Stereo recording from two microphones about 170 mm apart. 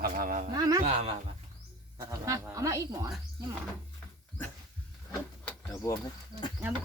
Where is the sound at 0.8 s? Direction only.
35° right (ahead or behind).